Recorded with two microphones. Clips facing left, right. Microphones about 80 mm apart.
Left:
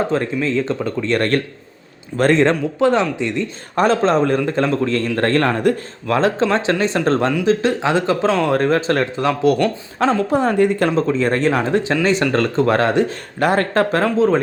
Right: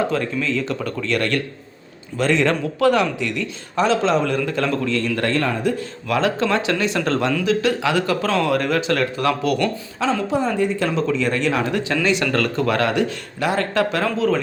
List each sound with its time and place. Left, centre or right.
0.1 s speech: left
3.8 s speech: left
5.3 s speech: left
6.1 s speech: left
10.0 s speech: left
10.8 s speech: left
13.4 s speech: left
14.0 s speech: left